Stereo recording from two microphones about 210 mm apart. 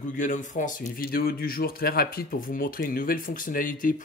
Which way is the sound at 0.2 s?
35° left (ahead or behind).